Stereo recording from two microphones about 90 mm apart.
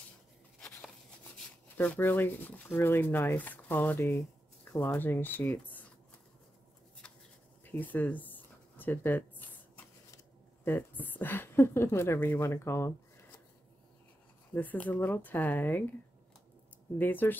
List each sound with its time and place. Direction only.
0.6 s a sound: 5° left (ahead or behind)
1.8 s speech: 20° left (ahead or behind)
7.6 s a sound: 20° left (ahead or behind)
10.6 s speech: 25° left (ahead or behind)
14.5 s speech: 20° left (ahead or behind)
17.0 s speech: 20° left (ahead or behind)